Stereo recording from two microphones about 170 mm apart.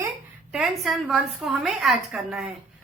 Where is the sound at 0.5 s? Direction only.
Centre (ahead or behind).